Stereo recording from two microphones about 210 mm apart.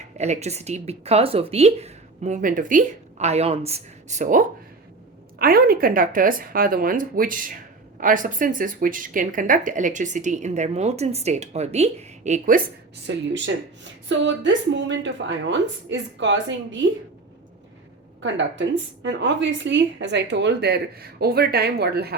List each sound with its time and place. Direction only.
0.2 s speech: 30° right (ahead or behind)
13.1 s a woman's voice: 60° right (ahead or behind)
18.2 s a woman's voice: 60° right (ahead or behind)